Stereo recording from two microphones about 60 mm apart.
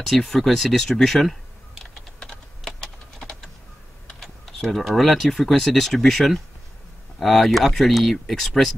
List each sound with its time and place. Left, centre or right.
0.0 s speech: centre
2.1 s typing: centre
4.1 s speech: centre